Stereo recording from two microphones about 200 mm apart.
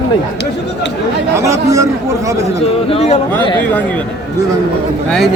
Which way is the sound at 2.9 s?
30° left (ahead or behind).